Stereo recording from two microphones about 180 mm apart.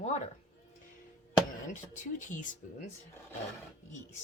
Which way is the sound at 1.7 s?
45° left (ahead or behind).